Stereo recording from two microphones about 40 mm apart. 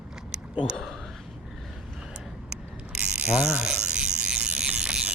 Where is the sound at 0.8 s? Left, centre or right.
Centre.